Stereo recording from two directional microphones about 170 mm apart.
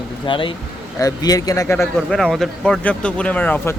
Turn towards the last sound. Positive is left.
turn(degrees=10)  # may be behind; listen again after turning